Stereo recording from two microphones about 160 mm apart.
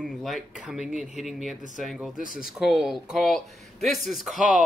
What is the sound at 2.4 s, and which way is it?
Speech, 5° right (ahead or behind).